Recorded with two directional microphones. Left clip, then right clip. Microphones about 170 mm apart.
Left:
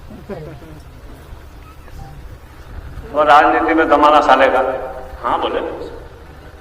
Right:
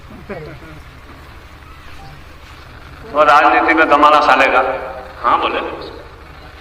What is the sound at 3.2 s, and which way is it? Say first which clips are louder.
A man's voice: right 1 dB; 40° left (ahead or behind).